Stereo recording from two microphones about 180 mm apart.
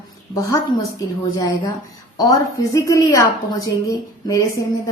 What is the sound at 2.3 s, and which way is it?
Speech, 15° left (ahead or behind).